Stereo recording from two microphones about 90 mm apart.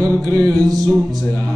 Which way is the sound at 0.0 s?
45° right (ahead or behind).